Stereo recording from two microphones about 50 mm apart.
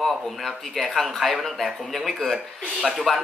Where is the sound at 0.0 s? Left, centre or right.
Centre.